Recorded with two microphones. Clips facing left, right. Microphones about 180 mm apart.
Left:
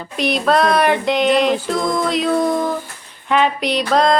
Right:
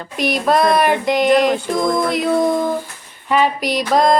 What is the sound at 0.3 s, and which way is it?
Female singing, 10° right (ahead or behind).